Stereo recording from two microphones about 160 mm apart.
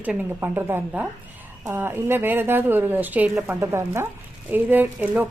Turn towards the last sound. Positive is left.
turn(degrees=-10)  # may be behind; listen again after turning